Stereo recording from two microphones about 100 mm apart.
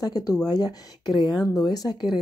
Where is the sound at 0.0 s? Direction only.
40° left (ahead or behind).